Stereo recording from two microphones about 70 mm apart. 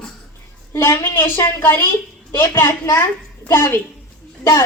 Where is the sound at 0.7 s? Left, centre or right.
Left.